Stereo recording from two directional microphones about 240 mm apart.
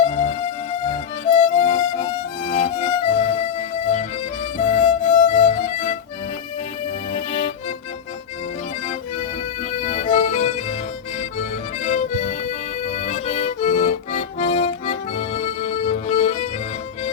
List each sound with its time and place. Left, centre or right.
0.1 s music: left
1.5 s music: left
4.5 s music: left
7.1 s accordion: left
9.8 s accordion: left
11.8 s accordion: left